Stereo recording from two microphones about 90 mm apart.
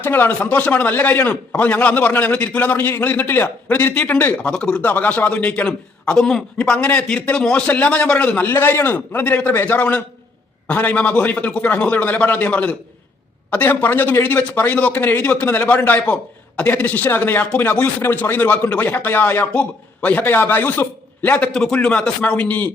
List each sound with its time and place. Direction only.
0.0 s speech: 25° left (ahead or behind)
4.5 s a man's voice: 10° left (ahead or behind)